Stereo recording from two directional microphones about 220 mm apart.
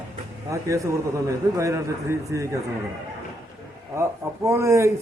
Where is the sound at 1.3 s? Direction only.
15° right (ahead or behind).